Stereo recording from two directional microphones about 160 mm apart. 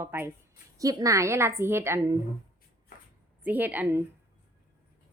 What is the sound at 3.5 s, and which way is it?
Speech, 10° right (ahead or behind).